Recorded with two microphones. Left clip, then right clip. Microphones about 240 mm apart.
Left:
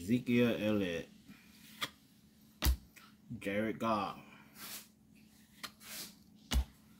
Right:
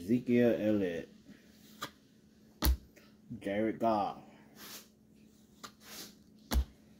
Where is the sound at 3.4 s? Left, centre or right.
Left.